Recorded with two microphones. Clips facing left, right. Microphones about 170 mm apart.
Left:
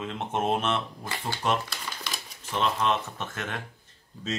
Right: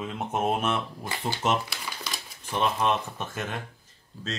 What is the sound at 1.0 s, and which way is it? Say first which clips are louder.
Speech: right 1 dB; 20° right (ahead or behind).